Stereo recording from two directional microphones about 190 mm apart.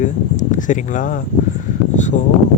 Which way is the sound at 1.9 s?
40° left (ahead or behind).